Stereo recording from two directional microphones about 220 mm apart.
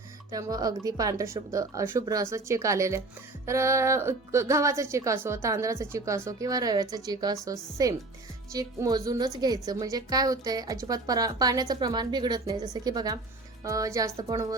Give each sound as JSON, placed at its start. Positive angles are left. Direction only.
{"t": 0.3, "sound": "a woman's voice", "side_deg": -15}